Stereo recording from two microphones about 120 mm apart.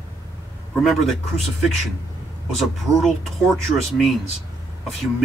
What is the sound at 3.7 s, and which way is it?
Speech, centre (ahead or behind).